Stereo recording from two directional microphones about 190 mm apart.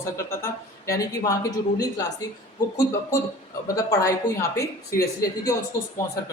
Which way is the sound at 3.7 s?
15° left (ahead or behind).